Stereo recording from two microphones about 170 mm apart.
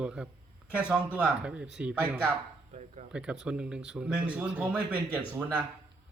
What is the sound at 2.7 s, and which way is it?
Speech, 40° right (ahead or behind).